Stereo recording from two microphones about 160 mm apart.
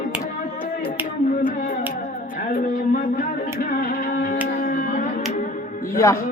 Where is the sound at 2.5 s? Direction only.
55° left (ahead or behind).